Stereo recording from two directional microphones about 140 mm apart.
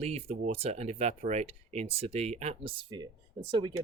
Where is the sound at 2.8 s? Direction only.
35° right (ahead or behind).